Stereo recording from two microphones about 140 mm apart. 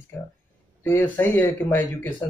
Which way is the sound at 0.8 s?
15° left (ahead or behind).